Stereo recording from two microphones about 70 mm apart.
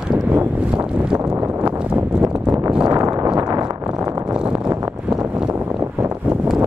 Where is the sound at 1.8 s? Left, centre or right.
Centre.